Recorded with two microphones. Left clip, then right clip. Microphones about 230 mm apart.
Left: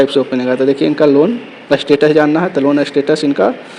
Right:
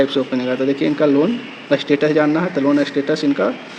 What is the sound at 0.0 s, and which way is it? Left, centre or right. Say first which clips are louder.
Speech: left 5 dB; centre.